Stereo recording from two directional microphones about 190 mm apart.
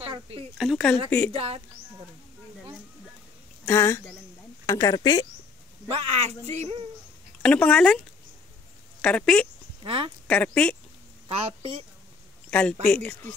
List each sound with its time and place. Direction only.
0.0 s speech: 30° right (ahead or behind)
0.6 s speech: centre (ahead or behind)
3.6 s speech: 15° left (ahead or behind)
5.9 s speech: 30° right (ahead or behind)
7.4 s speech: 5° left (ahead or behind)
9.0 s speech: 5° left (ahead or behind)
9.8 s speech: 30° right (ahead or behind)
10.2 s speech: 5° left (ahead or behind)
11.2 s speech: 30° right (ahead or behind)
12.4 s a sound: 10° left (ahead or behind)
12.8 s speech: 5° left (ahead or behind)